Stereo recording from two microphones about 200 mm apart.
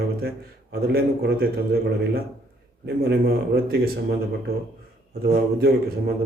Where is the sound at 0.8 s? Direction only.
50° right (ahead or behind).